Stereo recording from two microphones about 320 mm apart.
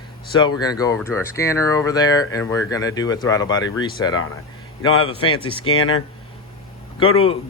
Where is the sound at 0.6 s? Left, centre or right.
Centre.